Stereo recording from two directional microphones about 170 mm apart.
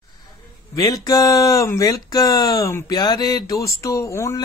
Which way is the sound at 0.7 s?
20° left (ahead or behind).